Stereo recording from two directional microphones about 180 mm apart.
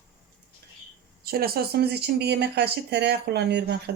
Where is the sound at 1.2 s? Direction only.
60° right (ahead or behind).